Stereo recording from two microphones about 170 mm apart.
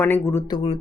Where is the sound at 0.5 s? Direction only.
35° left (ahead or behind).